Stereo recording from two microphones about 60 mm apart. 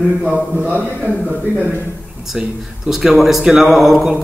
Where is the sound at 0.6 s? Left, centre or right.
Right.